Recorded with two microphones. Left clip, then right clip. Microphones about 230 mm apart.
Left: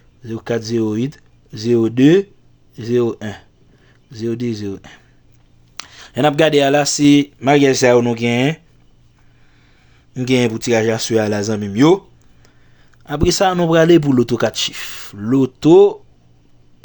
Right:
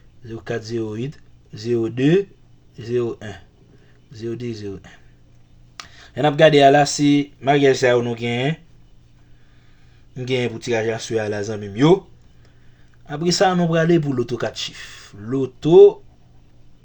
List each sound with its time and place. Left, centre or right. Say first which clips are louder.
0.2 s speech: left 6 dB; left
10.2 s speech: left 6 dB; left
13.1 s speech: left 3 dB; left